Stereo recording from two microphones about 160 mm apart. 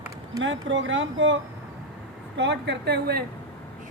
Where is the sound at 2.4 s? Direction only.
90° right.